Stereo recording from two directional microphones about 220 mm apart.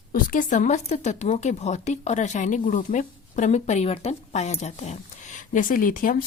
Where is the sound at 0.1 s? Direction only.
40° left (ahead or behind).